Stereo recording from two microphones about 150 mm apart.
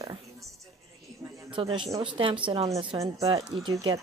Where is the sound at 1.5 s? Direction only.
35° right (ahead or behind).